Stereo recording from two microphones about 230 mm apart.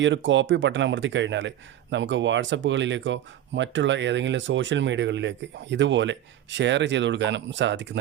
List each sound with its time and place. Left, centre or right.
0.0 s speech: right